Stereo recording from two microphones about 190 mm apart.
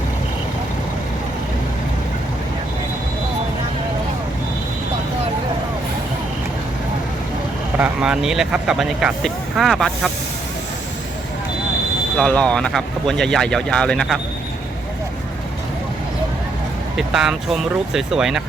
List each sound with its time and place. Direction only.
7.8 s speech: 5° right (ahead or behind)
12.1 s speech: 5° left (ahead or behind)
17.1 s speech: 5° right (ahead or behind)